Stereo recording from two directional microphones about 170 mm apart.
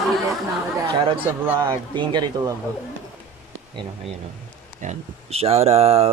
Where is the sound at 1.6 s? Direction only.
25° right (ahead or behind).